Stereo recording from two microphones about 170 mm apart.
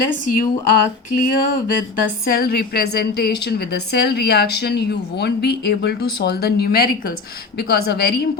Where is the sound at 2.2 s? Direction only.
65° left (ahead or behind).